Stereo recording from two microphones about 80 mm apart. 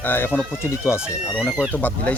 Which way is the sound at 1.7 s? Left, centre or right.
Left.